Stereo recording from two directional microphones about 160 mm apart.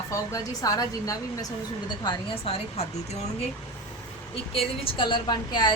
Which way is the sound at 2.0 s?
35° left (ahead or behind).